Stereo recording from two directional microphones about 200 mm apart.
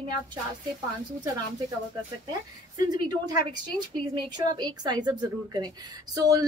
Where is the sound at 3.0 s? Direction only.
20° right (ahead or behind).